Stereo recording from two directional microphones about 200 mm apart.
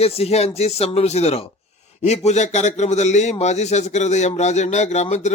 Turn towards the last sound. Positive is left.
turn(degrees=35)  # may be behind; listen again after turning